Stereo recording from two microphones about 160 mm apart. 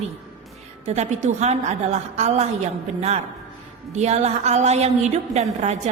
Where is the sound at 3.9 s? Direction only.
45° right (ahead or behind).